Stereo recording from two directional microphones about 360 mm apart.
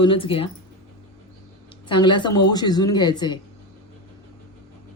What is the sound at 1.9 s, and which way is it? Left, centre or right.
Speech, centre.